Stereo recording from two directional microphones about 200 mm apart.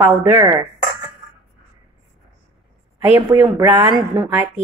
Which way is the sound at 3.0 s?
10° right (ahead or behind).